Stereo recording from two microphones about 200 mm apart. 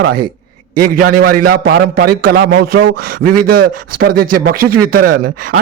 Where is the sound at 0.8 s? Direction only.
45° right (ahead or behind).